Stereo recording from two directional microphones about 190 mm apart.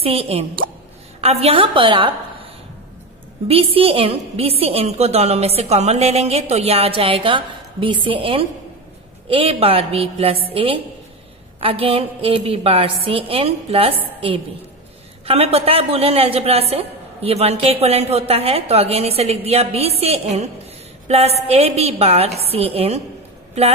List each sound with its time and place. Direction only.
0.0 s a woman's voice: 30° right (ahead or behind)
3.4 s a woman's voice: 30° right (ahead or behind)